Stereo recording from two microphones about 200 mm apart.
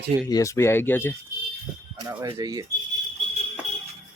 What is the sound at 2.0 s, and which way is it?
Speech, 20° right (ahead or behind).